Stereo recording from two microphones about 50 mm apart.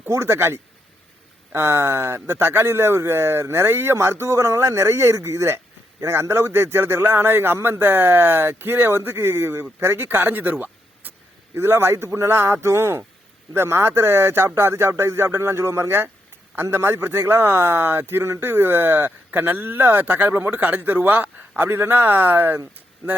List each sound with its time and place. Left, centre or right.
0.1 s speech: right
6.1 s speech: right
11.5 s speech: right
12.0 s speech: right
12.3 s speech: right
13.5 s speech: right